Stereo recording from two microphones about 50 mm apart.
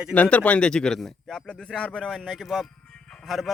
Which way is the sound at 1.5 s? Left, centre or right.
Centre.